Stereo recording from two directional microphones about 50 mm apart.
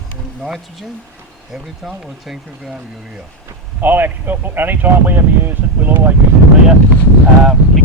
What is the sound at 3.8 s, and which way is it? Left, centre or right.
Speech, right.